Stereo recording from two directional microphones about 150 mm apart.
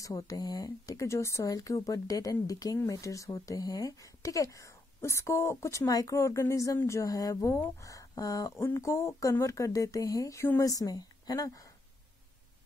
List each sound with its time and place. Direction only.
0.0 s speech: 25° left (ahead or behind)